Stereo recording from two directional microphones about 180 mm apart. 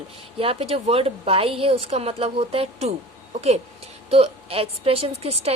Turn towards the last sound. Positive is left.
turn(degrees=-35)  # may be behind; listen again after turning